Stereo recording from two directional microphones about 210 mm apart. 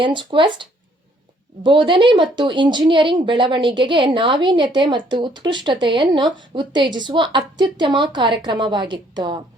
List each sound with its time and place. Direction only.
0.0 s a woman's voice: 25° right (ahead or behind)